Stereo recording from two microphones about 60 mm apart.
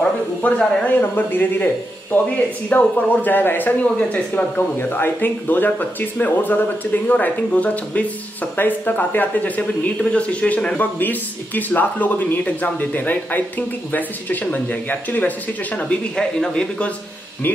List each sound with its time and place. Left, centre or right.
0.0 s speech: left
10.8 s speech: left